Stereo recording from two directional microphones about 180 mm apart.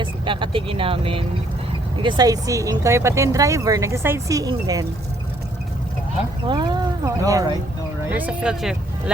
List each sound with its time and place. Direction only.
0.0 s speech: 25° right (ahead or behind)
6.5 s speech: 25° right (ahead or behind)
8.1 s speech: 5° right (ahead or behind)